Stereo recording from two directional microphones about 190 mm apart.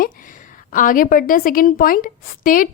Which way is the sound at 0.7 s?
45° left (ahead or behind).